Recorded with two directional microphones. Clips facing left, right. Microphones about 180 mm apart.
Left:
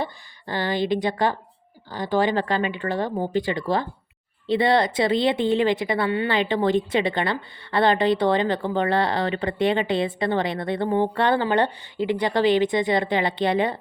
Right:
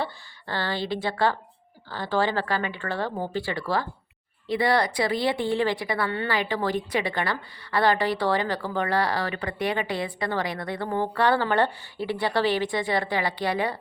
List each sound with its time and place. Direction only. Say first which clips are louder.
0.0 s speech: left 2 dB; 15° left (ahead or behind)